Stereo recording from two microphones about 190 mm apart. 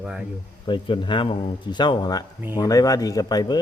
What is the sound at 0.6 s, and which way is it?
Speech, 25° left (ahead or behind).